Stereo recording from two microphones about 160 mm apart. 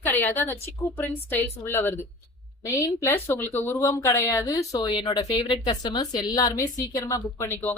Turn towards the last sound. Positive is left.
turn(degrees=20)  # may be behind; listen again after turning